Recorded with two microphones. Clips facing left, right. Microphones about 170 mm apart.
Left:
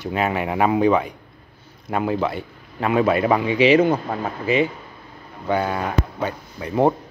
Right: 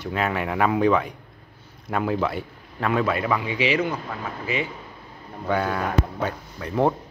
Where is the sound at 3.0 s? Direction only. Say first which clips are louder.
Left 6 dB; 25° left (ahead or behind).